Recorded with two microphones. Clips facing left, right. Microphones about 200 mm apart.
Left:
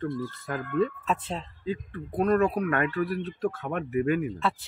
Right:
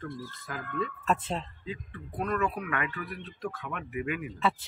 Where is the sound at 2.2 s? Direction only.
35° left (ahead or behind).